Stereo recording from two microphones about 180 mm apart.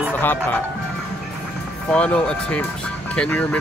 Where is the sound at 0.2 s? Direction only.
10° left (ahead or behind).